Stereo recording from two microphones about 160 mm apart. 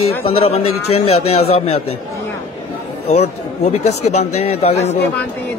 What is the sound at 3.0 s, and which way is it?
Speech, 40° left (ahead or behind).